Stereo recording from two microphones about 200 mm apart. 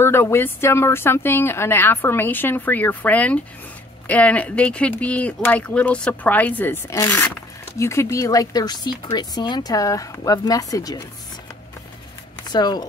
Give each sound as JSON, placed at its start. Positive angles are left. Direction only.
{"t": 0.0, "sound": "speech", "side_deg": 10}
{"t": 12.4, "sound": "speech", "side_deg": 20}